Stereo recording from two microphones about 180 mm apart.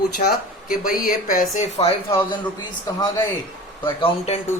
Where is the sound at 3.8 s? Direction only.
30° left (ahead or behind).